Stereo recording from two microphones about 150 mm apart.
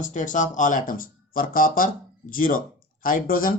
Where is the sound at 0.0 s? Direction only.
55° left (ahead or behind).